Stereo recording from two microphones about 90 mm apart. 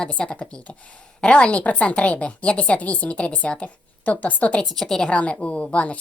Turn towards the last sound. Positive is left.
turn(degrees=15)  # may be behind; listen again after turning